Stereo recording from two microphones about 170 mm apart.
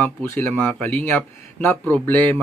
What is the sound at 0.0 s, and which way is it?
Speech, 10° left (ahead or behind).